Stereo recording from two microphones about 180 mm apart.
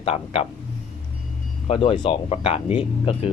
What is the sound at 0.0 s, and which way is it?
Speech, 30° left (ahead or behind).